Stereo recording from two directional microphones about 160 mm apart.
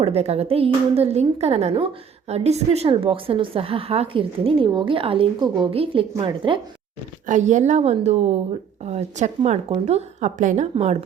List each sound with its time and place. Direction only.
0.0 s a woman's voice: 40° right (ahead or behind)
7.3 s a woman's voice: 50° right (ahead or behind)